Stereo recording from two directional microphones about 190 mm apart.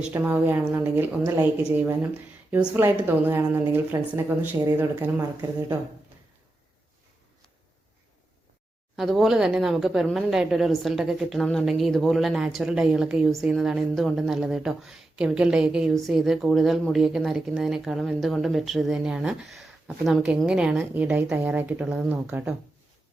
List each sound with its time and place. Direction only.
0.1 s a woman's voice: 10° right (ahead or behind)
9.0 s a woman's voice: centre (ahead or behind)